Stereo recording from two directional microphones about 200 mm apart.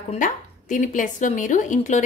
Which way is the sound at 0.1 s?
40° left (ahead or behind).